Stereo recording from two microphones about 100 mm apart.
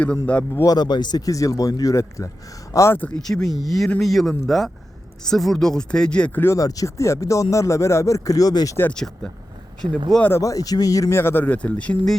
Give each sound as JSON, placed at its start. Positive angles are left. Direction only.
{"t": 0.0, "sound": "speech", "side_deg": 15}
{"t": 0.5, "sound": "speech", "side_deg": 40}
{"t": 3.2, "sound": "speech", "side_deg": 5}
{"t": 6.6, "sound": "speech", "side_deg": 35}
{"t": 8.8, "sound": "speech", "side_deg": 10}
{"t": 10.2, "sound": "speech", "side_deg": 20}
{"t": 10.4, "sound": "speech", "side_deg": 35}
{"t": 11.1, "sound": "speech", "side_deg": 25}